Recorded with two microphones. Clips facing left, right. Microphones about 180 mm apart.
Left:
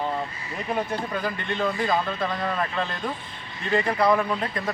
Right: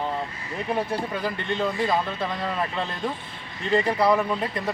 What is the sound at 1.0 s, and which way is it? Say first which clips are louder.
Speech: right 1 dB; 5° right (ahead or behind).